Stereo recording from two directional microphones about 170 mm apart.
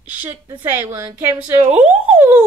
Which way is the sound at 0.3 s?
20° right (ahead or behind).